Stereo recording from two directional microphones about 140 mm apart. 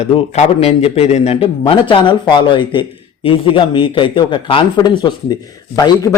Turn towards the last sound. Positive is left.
turn(degrees=25)  # may be behind; listen again after turning